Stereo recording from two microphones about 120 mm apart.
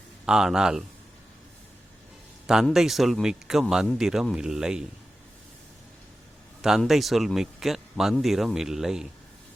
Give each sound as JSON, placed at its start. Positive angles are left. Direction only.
{"t": 0.3, "sound": "a man's voice", "side_deg": -5}
{"t": 2.5, "sound": "a man's voice", "side_deg": -5}
{"t": 6.6, "sound": "a man's voice", "side_deg": -5}